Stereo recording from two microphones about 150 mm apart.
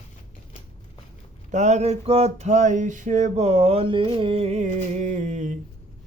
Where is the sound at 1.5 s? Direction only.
50° right (ahead or behind).